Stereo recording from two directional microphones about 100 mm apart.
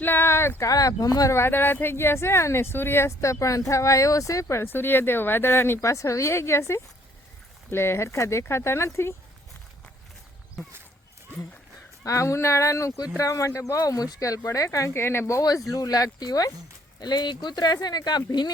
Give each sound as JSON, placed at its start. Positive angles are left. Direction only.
{"t": 0.0, "sound": "speech", "side_deg": 20}
{"t": 0.7, "sound": "speech", "side_deg": 35}
{"t": 12.0, "sound": "speech", "side_deg": 30}